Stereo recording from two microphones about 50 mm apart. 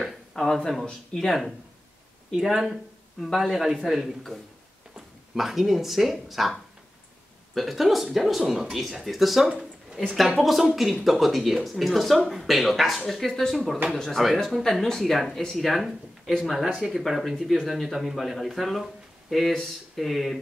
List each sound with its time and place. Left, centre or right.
0.3 s speech: centre
2.3 s speech: centre
7.5 s speech: centre